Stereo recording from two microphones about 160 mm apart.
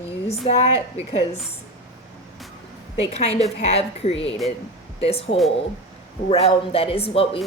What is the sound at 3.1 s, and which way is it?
Speech, 40° left (ahead or behind).